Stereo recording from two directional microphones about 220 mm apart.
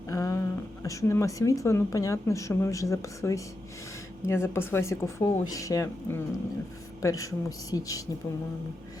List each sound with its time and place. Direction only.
0.1 s speech: 15° left (ahead or behind)